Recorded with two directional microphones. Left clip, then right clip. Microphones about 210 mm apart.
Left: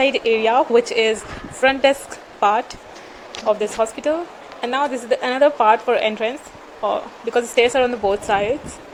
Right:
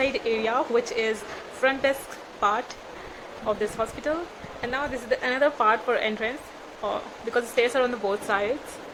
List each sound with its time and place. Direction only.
0.0 s a woman's voice: 15° left (ahead or behind)